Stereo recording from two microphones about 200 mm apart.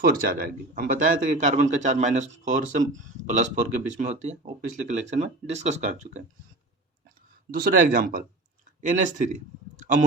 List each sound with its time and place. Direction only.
0.0 s speech: 45° right (ahead or behind)
7.5 s speech: 45° right (ahead or behind)